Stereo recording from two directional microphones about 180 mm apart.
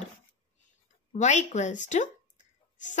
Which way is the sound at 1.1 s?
40° left (ahead or behind).